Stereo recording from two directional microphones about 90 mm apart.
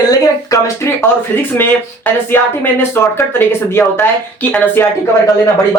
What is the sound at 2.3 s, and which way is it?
Speech, 20° left (ahead or behind).